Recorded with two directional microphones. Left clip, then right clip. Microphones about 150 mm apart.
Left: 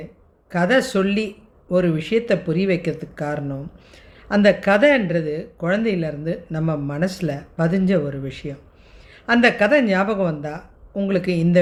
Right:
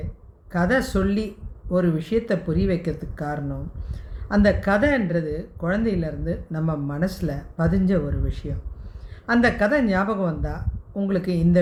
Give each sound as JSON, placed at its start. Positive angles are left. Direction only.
{"t": 0.5, "sound": "speech", "side_deg": 45}